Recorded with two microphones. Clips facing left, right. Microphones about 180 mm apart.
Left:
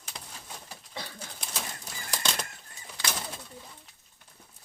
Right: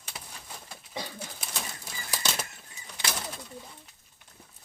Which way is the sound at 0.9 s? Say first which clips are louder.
Right 4 dB; 15° right (ahead or behind).